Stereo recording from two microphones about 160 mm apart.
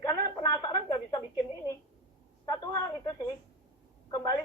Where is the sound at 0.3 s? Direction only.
25° left (ahead or behind).